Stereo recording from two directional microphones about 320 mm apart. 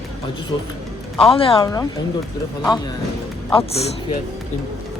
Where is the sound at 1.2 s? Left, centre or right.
Centre.